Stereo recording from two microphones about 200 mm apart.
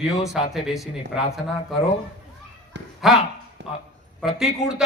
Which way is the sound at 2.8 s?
60° right (ahead or behind).